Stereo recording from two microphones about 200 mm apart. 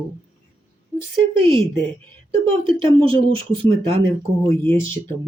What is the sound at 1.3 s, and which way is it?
Speech, 25° right (ahead or behind).